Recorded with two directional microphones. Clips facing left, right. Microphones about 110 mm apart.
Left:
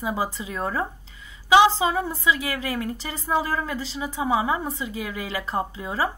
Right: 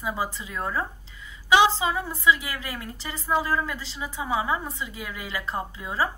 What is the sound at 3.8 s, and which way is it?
A woman's voice, 25° left (ahead or behind).